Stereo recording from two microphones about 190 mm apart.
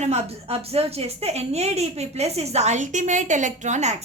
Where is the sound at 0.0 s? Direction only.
35° right (ahead or behind).